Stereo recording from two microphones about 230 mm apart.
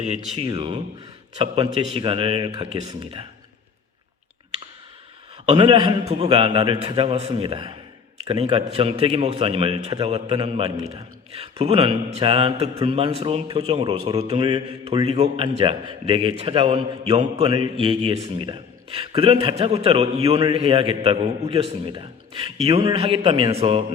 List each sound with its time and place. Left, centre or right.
0.3 s a man's voice: centre
5.5 s a man's voice: right